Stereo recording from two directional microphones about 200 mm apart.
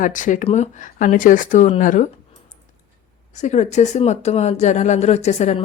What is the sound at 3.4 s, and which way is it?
Speech, 35° left (ahead or behind).